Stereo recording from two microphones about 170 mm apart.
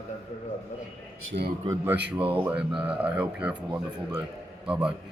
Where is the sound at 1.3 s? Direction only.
55° right (ahead or behind).